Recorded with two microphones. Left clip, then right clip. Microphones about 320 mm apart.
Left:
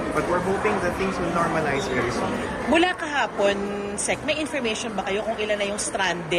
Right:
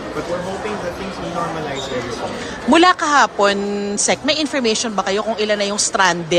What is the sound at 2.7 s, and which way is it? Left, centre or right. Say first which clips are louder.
Speech: right 9 dB; right.